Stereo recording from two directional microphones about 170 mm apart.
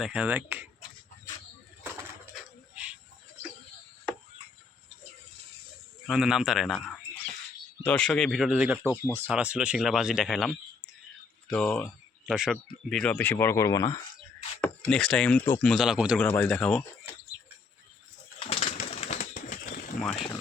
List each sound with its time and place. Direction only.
0.0 s speech: 5° right (ahead or behind)
2.3 s a sound: 5° right (ahead or behind)
6.1 s speech: 5° right (ahead or behind)
8.8 s speech: 15° left (ahead or behind)
9.2 s speech: 5° right (ahead or behind); by 11.9 s 10° left (ahead or behind)
12.2 s speech: 5° right (ahead or behind); by 14.0 s 20° left (ahead or behind)
14.6 s speech: 5° left (ahead or behind)
15.7 s speech: centre (ahead or behind)
16.2 s speech: 10° left (ahead or behind)
18.3 s bird: 35° left (ahead or behind); by 20.0 s 50° left (ahead or behind)